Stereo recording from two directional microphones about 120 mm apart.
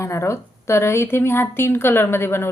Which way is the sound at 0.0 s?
25° left (ahead or behind).